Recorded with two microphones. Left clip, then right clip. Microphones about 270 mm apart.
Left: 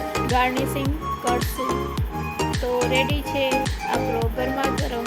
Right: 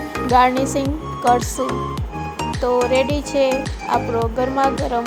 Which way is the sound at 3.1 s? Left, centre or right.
Centre.